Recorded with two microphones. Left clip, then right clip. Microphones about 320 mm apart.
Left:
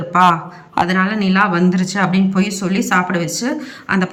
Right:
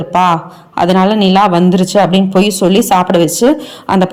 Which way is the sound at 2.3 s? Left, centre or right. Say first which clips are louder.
Right 10 dB; right.